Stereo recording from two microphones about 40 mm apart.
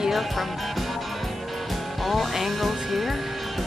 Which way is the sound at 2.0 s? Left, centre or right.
Centre.